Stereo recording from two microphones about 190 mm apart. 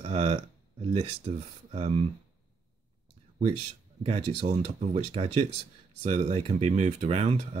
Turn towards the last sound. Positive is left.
turn(degrees=-35)  # may be behind; listen again after turning